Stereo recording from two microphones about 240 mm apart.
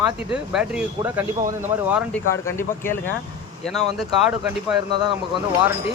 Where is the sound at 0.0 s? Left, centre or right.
Centre.